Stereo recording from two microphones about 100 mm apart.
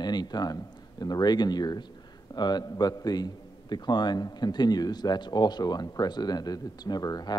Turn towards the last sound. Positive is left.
turn(degrees=40)  # may be behind; listen again after turning